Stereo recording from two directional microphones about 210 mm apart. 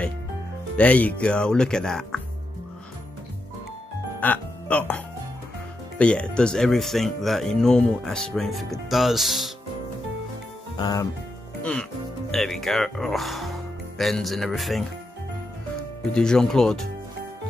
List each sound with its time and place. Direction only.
0.7 s speech: 5° left (ahead or behind)
4.2 s speech: 5° left (ahead or behind)
10.8 s speech: 20° left (ahead or behind)
12.3 s speech: centre (ahead or behind)
16.1 s speech: 5° left (ahead or behind)